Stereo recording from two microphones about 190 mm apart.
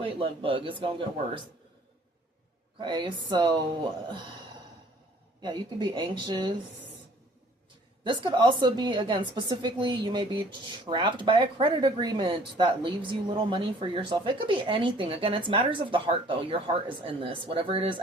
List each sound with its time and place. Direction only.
0.0 s a woman's voice: 25° right (ahead or behind)
2.7 s a woman's voice: 25° right (ahead or behind)
5.4 s a woman's voice: 25° right (ahead or behind)
8.0 s a woman's voice: 25° right (ahead or behind)